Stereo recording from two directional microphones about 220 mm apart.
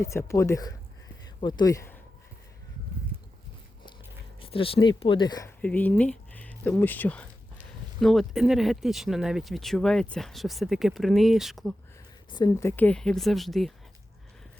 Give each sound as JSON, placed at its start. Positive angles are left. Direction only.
{"t": 0.0, "sound": "speech", "side_deg": 10}
{"t": 4.4, "sound": "speech", "side_deg": 25}
{"t": 5.6, "sound": "speech", "side_deg": 5}
{"t": 12.3, "sound": "speech", "side_deg": 15}